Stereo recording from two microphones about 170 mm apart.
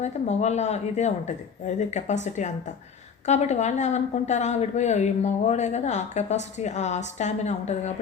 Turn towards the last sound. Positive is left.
turn(degrees=40)  # may be behind; listen again after turning